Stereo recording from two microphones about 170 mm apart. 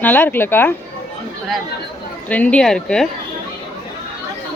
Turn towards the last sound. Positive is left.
turn(degrees=5)  # may be behind; listen again after turning